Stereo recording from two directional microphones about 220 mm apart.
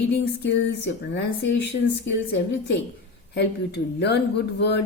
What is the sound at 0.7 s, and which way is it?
Speech, 55° left (ahead or behind).